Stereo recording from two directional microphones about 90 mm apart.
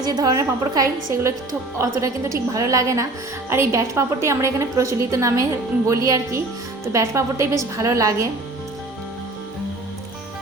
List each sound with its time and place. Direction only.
0.0 s a woman's voice: 45° right (ahead or behind)